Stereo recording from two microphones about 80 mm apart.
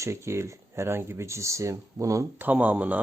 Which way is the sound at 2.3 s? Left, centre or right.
Right.